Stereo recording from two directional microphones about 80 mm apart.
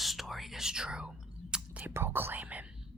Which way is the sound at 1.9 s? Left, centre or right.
Right.